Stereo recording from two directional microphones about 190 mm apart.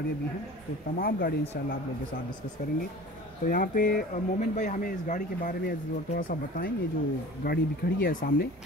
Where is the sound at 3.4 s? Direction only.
45° left (ahead or behind).